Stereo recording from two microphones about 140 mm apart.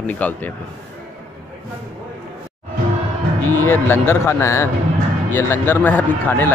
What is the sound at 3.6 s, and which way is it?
Speech, 15° left (ahead or behind).